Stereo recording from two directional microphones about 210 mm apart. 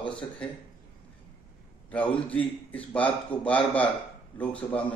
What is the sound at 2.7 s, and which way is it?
A man's voice, 5° left (ahead or behind).